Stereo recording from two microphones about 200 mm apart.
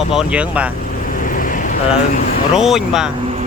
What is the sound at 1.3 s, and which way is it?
Vehicle, 45° left (ahead or behind).